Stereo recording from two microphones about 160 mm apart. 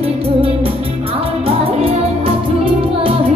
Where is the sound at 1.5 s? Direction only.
35° right (ahead or behind).